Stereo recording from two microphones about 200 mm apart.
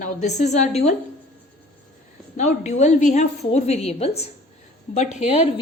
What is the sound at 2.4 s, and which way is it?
A woman's voice, 35° left (ahead or behind).